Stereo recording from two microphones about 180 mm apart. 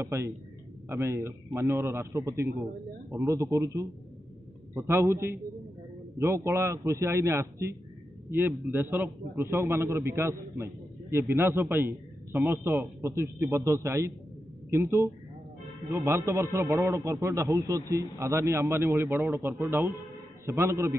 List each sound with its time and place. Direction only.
0.0 s a man's voice: 15° right (ahead or behind)